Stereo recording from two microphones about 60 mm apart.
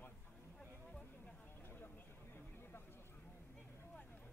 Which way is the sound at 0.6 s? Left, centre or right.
Centre.